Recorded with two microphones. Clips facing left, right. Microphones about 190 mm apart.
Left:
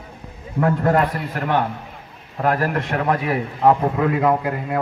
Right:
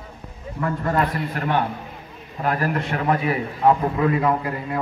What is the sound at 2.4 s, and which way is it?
A man's voice, 65° left (ahead or behind).